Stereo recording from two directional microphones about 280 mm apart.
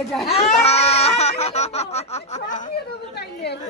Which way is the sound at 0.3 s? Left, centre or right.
Left.